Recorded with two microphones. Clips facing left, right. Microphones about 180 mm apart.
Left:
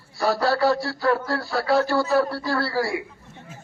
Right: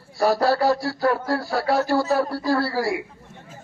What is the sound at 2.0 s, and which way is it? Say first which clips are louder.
Speech: even; 40° right (ahead or behind).